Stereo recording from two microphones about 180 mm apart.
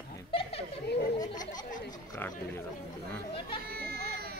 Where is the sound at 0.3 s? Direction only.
30° left (ahead or behind).